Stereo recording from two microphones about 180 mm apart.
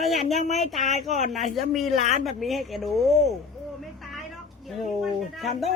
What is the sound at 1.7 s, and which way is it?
Speech, centre (ahead or behind).